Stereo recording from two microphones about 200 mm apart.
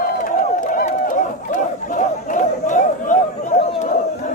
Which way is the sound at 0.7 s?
40° left (ahead or behind).